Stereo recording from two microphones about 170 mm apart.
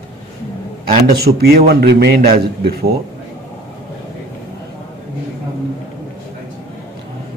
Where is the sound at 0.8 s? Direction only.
65° right (ahead or behind).